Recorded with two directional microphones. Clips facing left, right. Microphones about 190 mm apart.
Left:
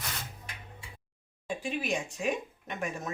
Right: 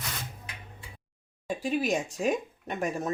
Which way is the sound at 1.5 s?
40° right (ahead or behind).